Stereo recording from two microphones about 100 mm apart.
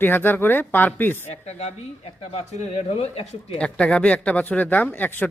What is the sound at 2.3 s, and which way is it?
Speech, 90° left.